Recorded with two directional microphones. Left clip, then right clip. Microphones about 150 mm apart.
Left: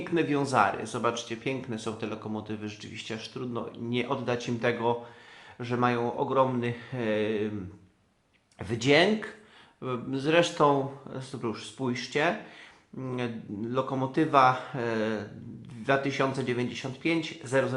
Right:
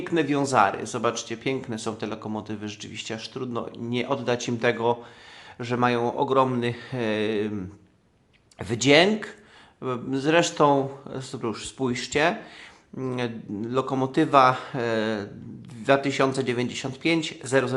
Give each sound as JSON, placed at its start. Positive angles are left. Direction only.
{"t": 0.0, "sound": "speech", "side_deg": -35}
{"t": 8.5, "sound": "speech", "side_deg": -40}